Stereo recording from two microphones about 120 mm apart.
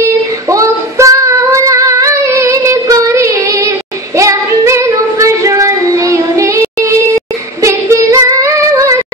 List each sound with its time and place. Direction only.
0.5 s female singing: 25° right (ahead or behind)